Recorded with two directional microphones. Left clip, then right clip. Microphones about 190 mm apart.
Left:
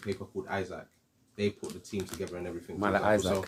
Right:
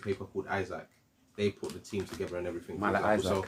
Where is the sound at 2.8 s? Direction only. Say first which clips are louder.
Left 2 dB; 35° left (ahead or behind).